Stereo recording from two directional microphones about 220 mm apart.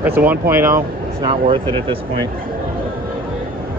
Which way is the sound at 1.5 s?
25° right (ahead or behind).